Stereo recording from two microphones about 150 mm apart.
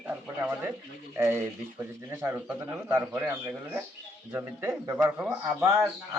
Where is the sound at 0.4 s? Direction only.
15° right (ahead or behind).